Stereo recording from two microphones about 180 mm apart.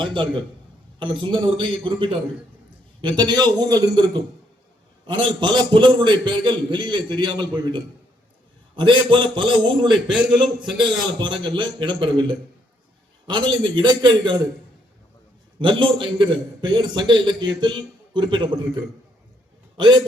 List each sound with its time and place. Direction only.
0.0 s a man's voice: 25° right (ahead or behind)
9.9 s a man's voice: 5° right (ahead or behind)
10.8 s a man's voice: 25° right (ahead or behind)
15.5 s a man's voice: 30° right (ahead or behind)